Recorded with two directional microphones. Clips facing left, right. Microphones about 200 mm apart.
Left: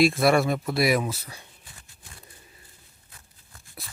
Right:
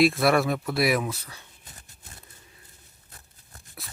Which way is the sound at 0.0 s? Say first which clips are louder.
Left 1 dB; centre (ahead or behind).